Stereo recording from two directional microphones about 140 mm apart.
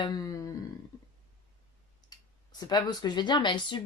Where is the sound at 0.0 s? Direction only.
25° left (ahead or behind).